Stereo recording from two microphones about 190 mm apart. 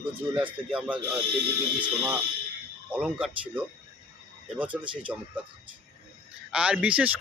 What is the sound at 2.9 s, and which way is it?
Speech, 5° right (ahead or behind).